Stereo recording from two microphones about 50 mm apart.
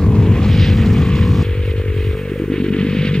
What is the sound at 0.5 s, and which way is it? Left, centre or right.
Vehicle, centre.